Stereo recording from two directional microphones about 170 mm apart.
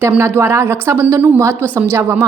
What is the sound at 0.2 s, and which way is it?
A woman's voice, 15° right (ahead or behind).